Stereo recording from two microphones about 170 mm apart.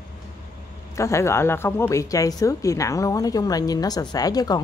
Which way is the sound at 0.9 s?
15° left (ahead or behind).